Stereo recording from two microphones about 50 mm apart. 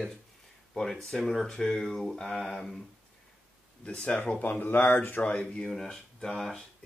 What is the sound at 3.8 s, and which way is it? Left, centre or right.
Speech, left.